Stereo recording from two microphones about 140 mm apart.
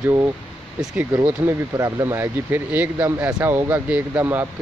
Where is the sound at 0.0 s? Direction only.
20° right (ahead or behind).